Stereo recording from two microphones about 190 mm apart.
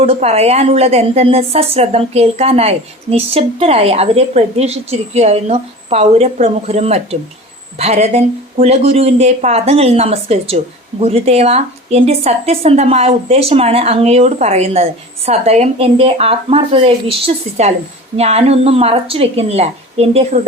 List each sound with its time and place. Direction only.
0.0 s a woman's voice: 35° right (ahead or behind)